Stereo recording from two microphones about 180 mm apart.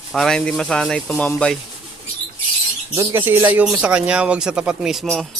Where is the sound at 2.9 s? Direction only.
15° right (ahead or behind).